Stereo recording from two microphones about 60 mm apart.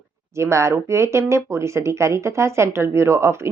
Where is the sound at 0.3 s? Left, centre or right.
Right.